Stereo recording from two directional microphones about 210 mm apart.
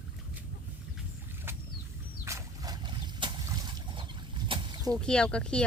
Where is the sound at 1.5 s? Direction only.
10° right (ahead or behind).